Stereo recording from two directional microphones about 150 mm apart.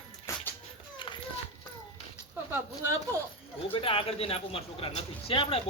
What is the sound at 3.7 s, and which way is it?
Speech, 35° left (ahead or behind).